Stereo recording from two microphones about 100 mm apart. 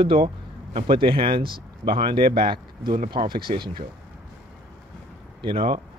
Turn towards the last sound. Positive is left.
turn(degrees=-60)  # may be behind; listen again after turning